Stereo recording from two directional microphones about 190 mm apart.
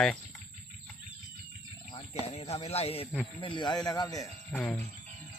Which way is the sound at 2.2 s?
35° left (ahead or behind).